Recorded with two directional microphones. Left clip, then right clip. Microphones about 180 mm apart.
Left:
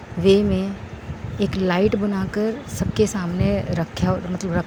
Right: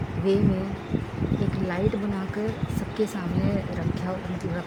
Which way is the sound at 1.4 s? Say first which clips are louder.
Left 10 dB; 35° left (ahead or behind).